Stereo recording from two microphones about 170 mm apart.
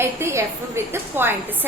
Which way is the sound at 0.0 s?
15° right (ahead or behind).